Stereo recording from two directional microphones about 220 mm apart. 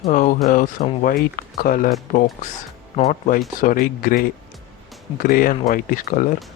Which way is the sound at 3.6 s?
40° left (ahead or behind).